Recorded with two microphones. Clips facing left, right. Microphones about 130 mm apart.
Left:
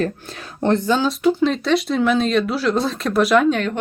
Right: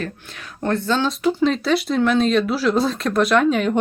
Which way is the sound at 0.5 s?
20° left (ahead or behind).